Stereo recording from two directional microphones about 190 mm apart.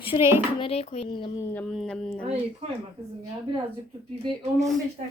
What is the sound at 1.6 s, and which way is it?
Speech, centre (ahead or behind).